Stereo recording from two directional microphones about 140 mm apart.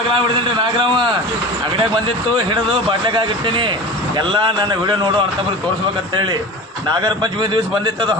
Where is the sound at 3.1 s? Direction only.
35° right (ahead or behind).